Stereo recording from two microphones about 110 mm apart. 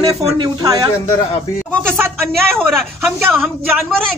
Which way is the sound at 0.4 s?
35° right (ahead or behind).